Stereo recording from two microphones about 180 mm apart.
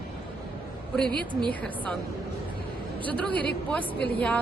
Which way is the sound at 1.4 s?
5° left (ahead or behind).